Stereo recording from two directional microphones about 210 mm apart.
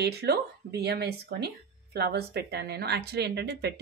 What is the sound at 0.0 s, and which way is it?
Speech, 50° right (ahead or behind).